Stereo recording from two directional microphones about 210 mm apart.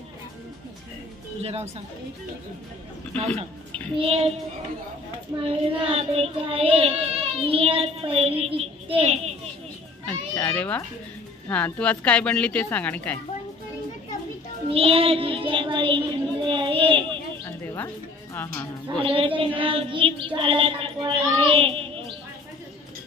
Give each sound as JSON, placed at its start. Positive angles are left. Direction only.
{"t": 1.4, "sound": "speech", "side_deg": -30}
{"t": 4.0, "sound": "speech", "side_deg": -30}
{"t": 5.4, "sound": "speech", "side_deg": -25}
{"t": 10.0, "sound": "a child's voice", "side_deg": 10}
{"t": 14.7, "sound": "child singing", "side_deg": -25}
{"t": 17.5, "sound": "music", "side_deg": 10}
{"t": 19.0, "sound": "speech", "side_deg": -25}